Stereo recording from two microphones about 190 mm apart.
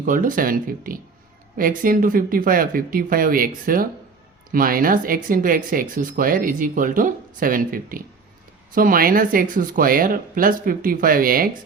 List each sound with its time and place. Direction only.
0.0 s speech: 45° right (ahead or behind)